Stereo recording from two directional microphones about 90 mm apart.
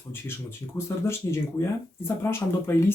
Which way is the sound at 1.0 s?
30° left (ahead or behind).